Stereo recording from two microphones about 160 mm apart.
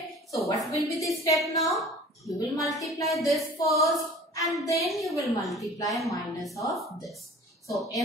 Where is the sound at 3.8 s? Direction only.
20° left (ahead or behind).